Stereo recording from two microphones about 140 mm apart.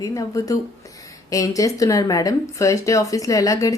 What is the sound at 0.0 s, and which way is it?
A woman's voice, 25° left (ahead or behind).